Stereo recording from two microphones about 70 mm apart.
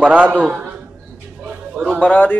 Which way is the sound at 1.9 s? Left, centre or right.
Centre.